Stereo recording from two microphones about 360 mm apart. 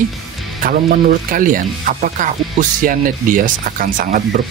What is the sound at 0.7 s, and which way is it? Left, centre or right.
Speech, right.